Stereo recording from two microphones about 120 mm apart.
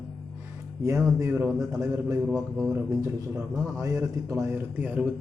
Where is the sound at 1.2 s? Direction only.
25° right (ahead or behind).